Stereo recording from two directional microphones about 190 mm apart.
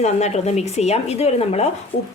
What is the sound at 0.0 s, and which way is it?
Speech, 35° left (ahead or behind).